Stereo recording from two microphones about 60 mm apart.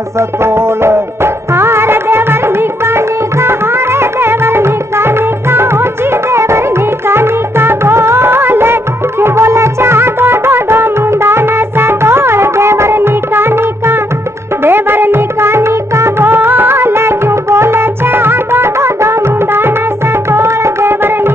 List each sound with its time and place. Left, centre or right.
0.4 s music: right
20.2 s tabla: right